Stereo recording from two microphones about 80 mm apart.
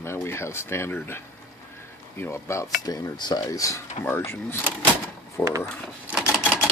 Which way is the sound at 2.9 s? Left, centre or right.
Left.